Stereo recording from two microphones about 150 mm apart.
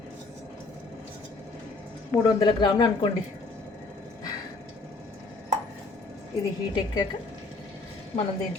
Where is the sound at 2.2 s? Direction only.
30° left (ahead or behind).